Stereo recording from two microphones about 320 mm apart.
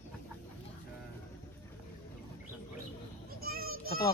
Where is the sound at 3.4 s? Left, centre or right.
Right.